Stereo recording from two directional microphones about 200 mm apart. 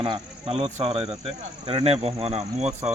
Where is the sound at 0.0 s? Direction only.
25° right (ahead or behind).